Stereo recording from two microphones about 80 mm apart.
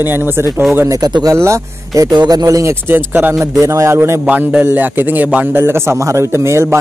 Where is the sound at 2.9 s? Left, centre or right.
Right.